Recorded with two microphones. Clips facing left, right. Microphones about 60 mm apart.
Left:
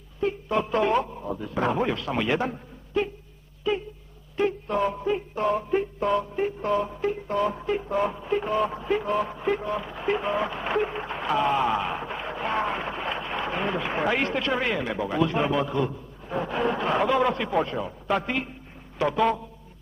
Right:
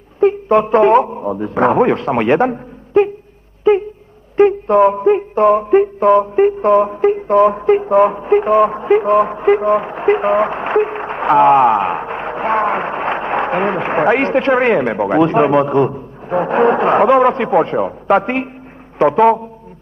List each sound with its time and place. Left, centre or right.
0.2 s a man's voice: right
3.7 s a sound: right
4.4 s music: right
18.9 s a man's voice: right